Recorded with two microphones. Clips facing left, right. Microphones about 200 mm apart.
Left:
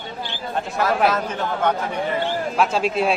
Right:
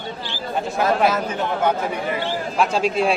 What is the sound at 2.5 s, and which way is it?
Speech, centre (ahead or behind).